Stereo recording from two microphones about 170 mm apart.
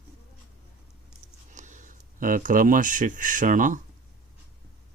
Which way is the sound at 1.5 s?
45° right (ahead or behind).